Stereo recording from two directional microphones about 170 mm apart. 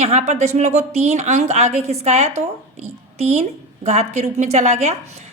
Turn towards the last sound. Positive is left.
turn(degrees=-40)  # may be behind; listen again after turning